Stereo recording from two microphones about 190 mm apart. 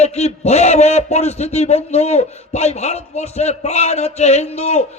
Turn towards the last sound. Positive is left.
turn(degrees=35)  # may be behind; listen again after turning